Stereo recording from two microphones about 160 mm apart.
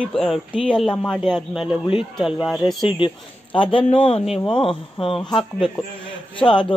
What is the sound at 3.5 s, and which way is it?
Speech, 35° left (ahead or behind).